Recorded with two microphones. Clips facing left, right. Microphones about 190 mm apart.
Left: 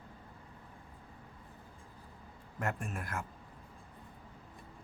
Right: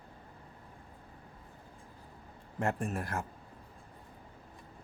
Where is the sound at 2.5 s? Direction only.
30° right (ahead or behind).